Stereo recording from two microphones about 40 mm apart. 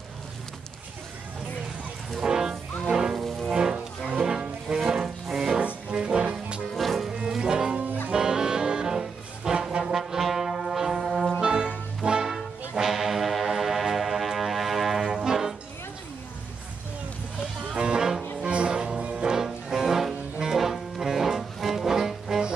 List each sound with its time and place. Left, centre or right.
2.2 s music: centre
3.2 s music: centre
3.4 s music: centre
5.9 s music: right
6.7 s music: centre
7.2 s music: centre
9.9 s brass instrument: centre
11.4 s music: right
12.8 s music: centre
17.7 s music: right
18.4 s music: right; by 22.4 s centre